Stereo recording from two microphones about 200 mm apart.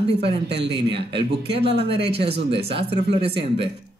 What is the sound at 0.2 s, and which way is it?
Speech, 55° right (ahead or behind).